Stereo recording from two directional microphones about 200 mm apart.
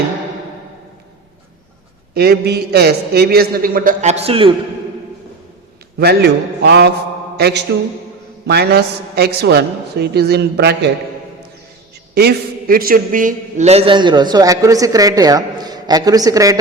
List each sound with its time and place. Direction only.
2.1 s a man's voice: 50° right (ahead or behind); by 4.5 s 30° right (ahead or behind)
6.0 s a man's voice: 55° right (ahead or behind)
7.3 s a sound: 55° right (ahead or behind)
8.4 s a man's voice: 55° right (ahead or behind)
12.1 s a man's voice: 50° right (ahead or behind); by 16.6 s 20° right (ahead or behind)